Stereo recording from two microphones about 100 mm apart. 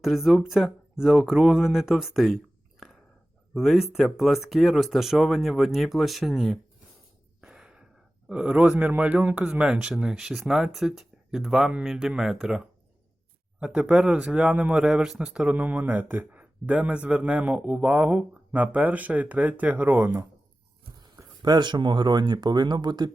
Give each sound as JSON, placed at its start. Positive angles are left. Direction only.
{"t": 0.0, "sound": "speech", "side_deg": 0}
{"t": 3.5, "sound": "speech", "side_deg": 0}
{"t": 7.4, "sound": "gasp", "side_deg": -5}
{"t": 8.3, "sound": "speech", "side_deg": -10}
{"t": 21.2, "sound": "speech", "side_deg": -40}